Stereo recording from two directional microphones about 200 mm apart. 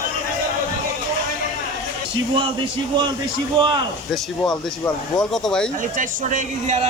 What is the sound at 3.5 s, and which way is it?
Speech, 25° right (ahead or behind).